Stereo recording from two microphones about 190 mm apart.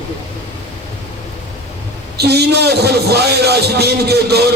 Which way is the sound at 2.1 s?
60° right (ahead or behind).